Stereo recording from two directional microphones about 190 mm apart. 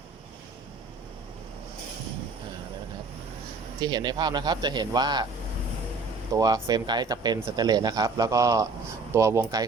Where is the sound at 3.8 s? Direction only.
20° right (ahead or behind).